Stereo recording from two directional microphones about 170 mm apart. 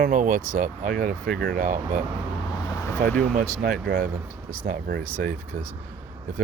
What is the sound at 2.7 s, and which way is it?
Vehicle, 15° left (ahead or behind).